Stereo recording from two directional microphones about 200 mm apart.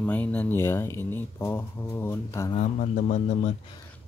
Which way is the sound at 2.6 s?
35° left (ahead or behind).